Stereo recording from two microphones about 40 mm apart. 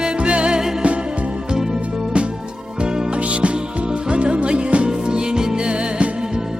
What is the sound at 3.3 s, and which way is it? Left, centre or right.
Music, right.